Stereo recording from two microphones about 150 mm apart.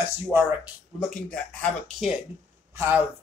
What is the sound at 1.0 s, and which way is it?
Speech, 5° left (ahead or behind).